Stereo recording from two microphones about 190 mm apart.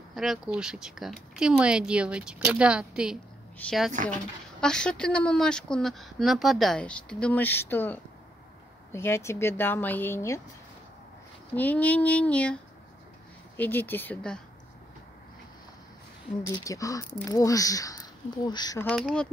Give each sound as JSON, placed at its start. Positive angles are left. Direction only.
{"t": 0.1, "sound": "a woman's voice", "side_deg": 0}
{"t": 11.5, "sound": "speech", "side_deg": 10}
{"t": 13.6, "sound": "speech", "side_deg": 10}
{"t": 16.5, "sound": "speech", "side_deg": 15}
{"t": 18.8, "sound": "a woman's voice", "side_deg": 5}